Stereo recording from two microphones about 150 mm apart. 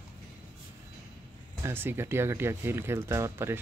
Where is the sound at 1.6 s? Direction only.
15° right (ahead or behind).